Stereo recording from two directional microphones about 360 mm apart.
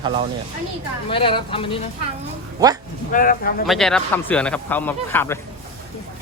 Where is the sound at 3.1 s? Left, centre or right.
Left.